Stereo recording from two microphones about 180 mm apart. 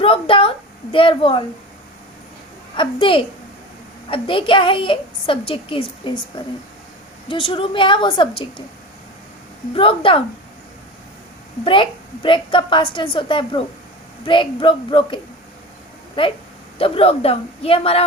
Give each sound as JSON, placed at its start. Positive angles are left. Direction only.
{"t": 0.0, "sound": "a woman's voice", "side_deg": 30}
{"t": 2.7, "sound": "a woman's voice", "side_deg": 30}
{"t": 7.3, "sound": "a woman's voice", "side_deg": 30}
{"t": 9.7, "sound": "a man's voice", "side_deg": 30}
{"t": 11.6, "sound": "a woman's voice", "side_deg": 30}
{"t": 16.7, "sound": "a man's voice", "side_deg": 30}